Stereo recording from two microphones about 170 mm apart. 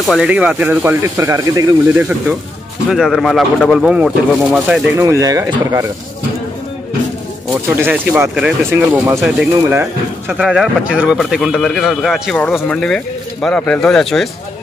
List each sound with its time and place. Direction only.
0.0 s speech: centre (ahead or behind)
4.9 s speech: 20° right (ahead or behind)
7.7 s speech: 10° right (ahead or behind)
10.3 s speech: centre (ahead or behind)